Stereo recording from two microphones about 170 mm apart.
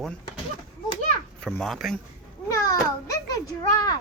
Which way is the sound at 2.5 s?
20° left (ahead or behind).